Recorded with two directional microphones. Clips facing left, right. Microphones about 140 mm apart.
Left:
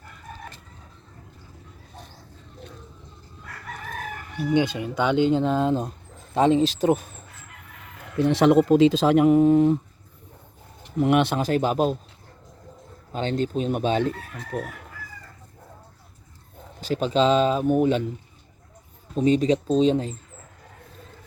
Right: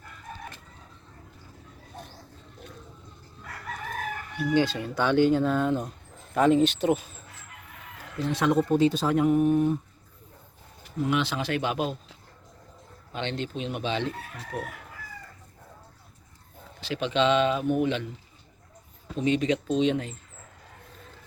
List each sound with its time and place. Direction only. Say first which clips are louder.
4.5 s speech: left 2 dB; 15° left (ahead or behind); by 7.0 s 40° left (ahead or behind)
8.1 s speech: left 7 dB; 80° left
11.0 s speech: left 6 dB; 60° left (ahead or behind); by 11.9 s 40° left (ahead or behind)
13.1 s speech: left 7 dB; 40° left (ahead or behind)
16.8 s speech: left 4 dB; 40° left (ahead or behind)
19.1 s speech: left 5 dB; 35° left (ahead or behind)